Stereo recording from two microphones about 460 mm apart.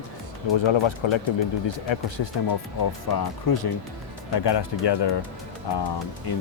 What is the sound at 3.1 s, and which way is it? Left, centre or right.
Speech, left.